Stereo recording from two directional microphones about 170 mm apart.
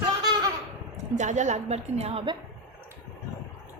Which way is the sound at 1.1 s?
45° right (ahead or behind).